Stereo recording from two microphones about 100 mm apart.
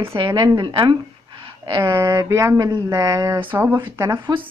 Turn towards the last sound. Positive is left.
turn(degrees=-40)  # may be behind; listen again after turning